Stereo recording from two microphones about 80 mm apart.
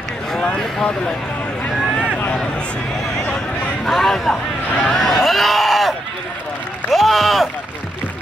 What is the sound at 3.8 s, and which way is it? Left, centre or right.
Speech, centre.